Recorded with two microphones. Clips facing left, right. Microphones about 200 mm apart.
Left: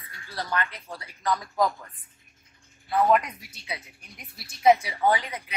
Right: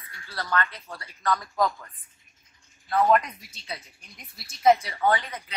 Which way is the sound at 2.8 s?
5° left (ahead or behind).